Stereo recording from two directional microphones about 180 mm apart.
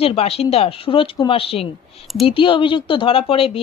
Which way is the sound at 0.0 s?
35° left (ahead or behind).